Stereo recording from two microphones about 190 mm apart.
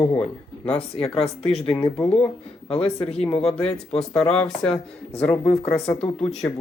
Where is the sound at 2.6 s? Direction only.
30° left (ahead or behind).